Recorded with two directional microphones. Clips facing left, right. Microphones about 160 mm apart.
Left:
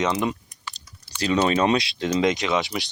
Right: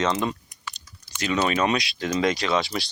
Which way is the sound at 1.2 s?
30° left (ahead or behind).